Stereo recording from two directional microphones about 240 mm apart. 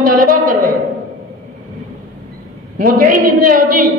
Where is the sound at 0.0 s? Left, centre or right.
Right.